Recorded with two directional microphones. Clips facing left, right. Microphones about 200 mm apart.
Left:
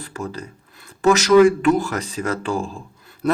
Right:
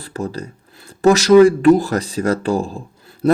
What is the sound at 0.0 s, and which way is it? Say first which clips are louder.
Speech: right 4 dB; 35° right (ahead or behind).